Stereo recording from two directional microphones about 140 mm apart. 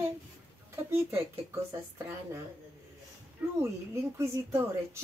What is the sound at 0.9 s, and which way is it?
Speech, 20° right (ahead or behind).